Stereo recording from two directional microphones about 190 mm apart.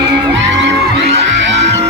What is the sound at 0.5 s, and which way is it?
Music, 70° right (ahead or behind).